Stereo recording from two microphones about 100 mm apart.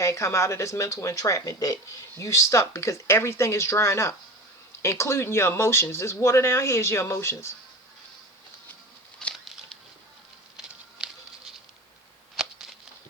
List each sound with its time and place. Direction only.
0.0 s speech: 30° left (ahead or behind)
9.1 s bird flight: 5° left (ahead or behind)
10.6 s patter: 10° right (ahead or behind)
12.4 s a sound: centre (ahead or behind)